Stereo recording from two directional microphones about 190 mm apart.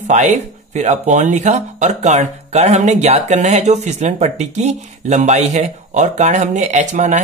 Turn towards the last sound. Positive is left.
turn(degrees=-40)  # may be behind; listen again after turning